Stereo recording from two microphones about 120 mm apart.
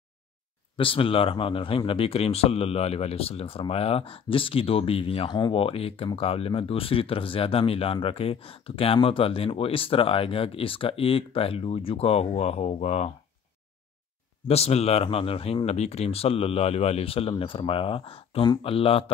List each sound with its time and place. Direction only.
0.7 s speech: 50° left (ahead or behind)
14.5 s speech: 60° left (ahead or behind)